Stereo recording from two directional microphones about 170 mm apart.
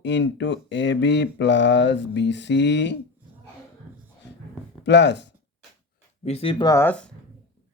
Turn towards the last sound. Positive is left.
turn(degrees=10)  # may be behind; listen again after turning